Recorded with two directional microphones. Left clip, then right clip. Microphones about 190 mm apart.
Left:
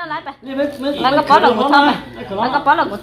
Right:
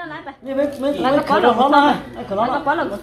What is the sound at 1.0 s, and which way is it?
A woman's voice, 50° left (ahead or behind).